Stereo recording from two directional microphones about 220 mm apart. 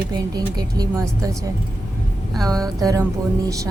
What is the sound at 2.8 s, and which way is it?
Speech, 15° right (ahead or behind).